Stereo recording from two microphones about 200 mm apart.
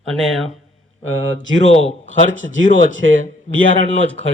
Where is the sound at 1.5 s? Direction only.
70° right (ahead or behind).